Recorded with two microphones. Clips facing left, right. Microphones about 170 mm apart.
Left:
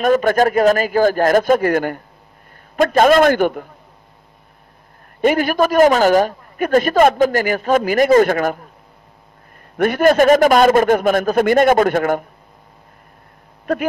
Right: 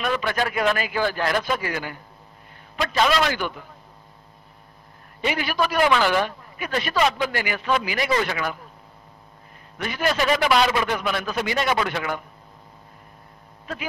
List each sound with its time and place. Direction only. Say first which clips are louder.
0.0 s a man's voice: left 11 dB; 45° left (ahead or behind)
5.2 s a man's voice: left 9 dB; 50° left (ahead or behind)
9.8 s a man's voice: left 12 dB; 55° left (ahead or behind)